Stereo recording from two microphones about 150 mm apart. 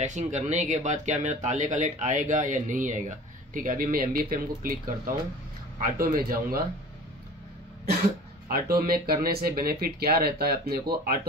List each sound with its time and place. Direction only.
0.0 s speech: 55° right (ahead or behind)
5.9 s speech: 75° right (ahead or behind)
8.5 s speech: 85° right